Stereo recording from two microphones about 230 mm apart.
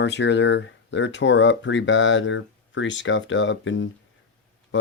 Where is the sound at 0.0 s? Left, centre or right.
Left.